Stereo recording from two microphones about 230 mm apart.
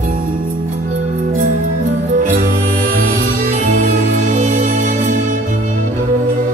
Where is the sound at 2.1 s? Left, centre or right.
Right.